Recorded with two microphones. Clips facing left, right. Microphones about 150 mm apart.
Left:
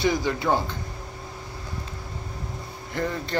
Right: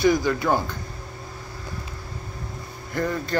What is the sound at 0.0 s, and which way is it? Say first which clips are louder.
Speech: right 4 dB; 25° left (ahead or behind).